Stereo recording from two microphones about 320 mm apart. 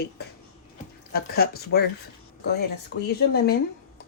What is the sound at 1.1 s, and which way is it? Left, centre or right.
Speech, left.